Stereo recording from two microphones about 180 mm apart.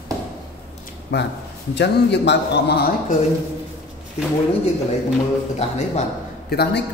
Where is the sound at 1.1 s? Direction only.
75° left (ahead or behind).